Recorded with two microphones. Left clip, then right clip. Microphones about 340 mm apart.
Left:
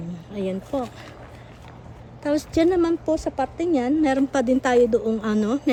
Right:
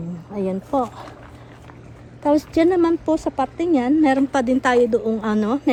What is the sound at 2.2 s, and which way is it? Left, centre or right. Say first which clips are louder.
Speech: right 4 dB; centre.